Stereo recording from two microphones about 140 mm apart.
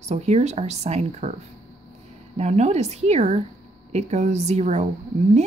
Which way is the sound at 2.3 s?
50° right (ahead or behind).